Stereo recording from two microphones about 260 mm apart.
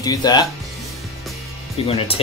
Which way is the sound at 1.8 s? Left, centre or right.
Left.